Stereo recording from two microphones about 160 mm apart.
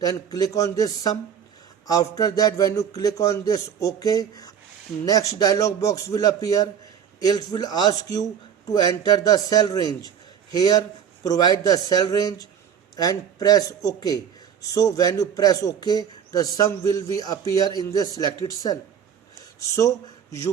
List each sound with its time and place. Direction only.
0.0 s a man's voice: 25° left (ahead or behind)